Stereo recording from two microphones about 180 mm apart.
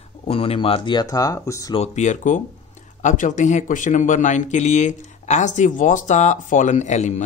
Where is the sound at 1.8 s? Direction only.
40° left (ahead or behind).